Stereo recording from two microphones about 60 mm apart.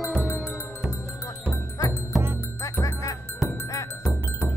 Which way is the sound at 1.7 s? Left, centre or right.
Left.